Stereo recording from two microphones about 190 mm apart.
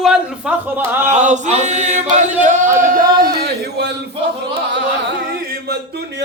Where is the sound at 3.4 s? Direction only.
60° right (ahead or behind).